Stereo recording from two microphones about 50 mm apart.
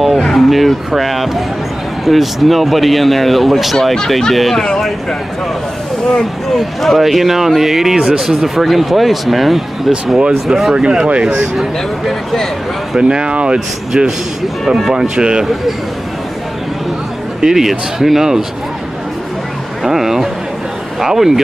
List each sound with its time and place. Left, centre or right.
0.0 s music: centre
2.0 s speech: centre
6.0 s speech: centre
6.6 s speech: centre
10.7 s speech: centre
12.1 s speech: centre
13.1 s speech: centre
17.4 s speech: centre
19.8 s a sound: centre
21.0 s speech: centre